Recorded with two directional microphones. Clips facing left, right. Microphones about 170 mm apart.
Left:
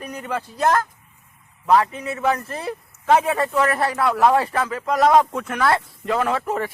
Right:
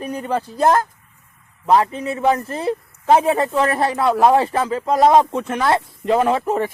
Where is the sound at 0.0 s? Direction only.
30° right (ahead or behind).